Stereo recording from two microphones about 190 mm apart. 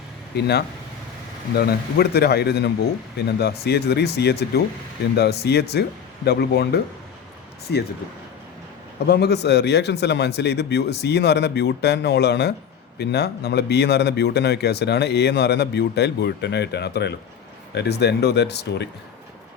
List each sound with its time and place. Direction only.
0.3 s speech: 60° left (ahead or behind)
9.0 s speech: 60° left (ahead or behind)